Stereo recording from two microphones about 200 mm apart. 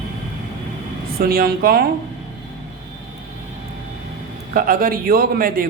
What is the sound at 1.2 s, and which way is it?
Speech, 50° right (ahead or behind).